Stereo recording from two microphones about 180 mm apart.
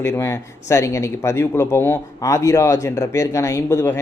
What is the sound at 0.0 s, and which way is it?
A man's voice, 15° left (ahead or behind).